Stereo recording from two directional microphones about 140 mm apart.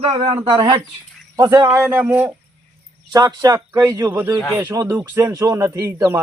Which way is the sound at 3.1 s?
25° right (ahead or behind).